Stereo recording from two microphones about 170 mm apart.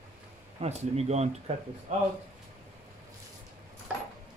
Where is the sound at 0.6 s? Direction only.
40° right (ahead or behind).